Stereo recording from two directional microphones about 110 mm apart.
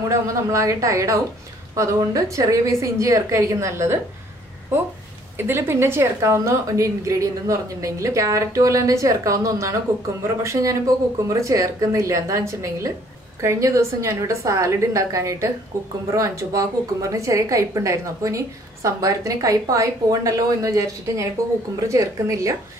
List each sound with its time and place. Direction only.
0.1 s a woman's voice: 30° right (ahead or behind)
5.4 s a woman's voice: 20° right (ahead or behind)